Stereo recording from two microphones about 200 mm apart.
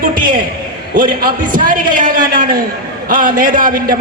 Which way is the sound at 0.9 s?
45° right (ahead or behind).